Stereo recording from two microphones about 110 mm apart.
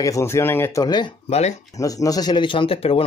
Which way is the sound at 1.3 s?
90° left.